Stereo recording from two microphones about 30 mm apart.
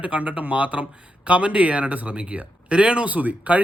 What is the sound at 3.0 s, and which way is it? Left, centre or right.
Speech, right.